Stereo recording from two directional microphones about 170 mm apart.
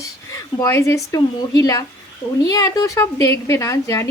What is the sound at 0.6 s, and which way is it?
A woman's voice, 15° left (ahead or behind).